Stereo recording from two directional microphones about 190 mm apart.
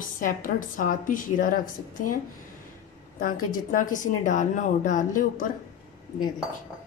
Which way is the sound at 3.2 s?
45° left (ahead or behind).